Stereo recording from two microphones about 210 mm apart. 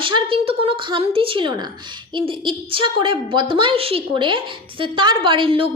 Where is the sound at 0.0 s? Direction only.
25° right (ahead or behind).